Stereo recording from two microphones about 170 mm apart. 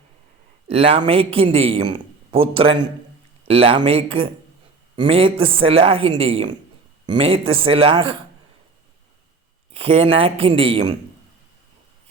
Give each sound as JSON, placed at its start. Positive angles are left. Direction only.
{"t": 0.7, "sound": "a man's voice", "side_deg": -35}
{"t": 9.7, "sound": "a man's voice", "side_deg": -35}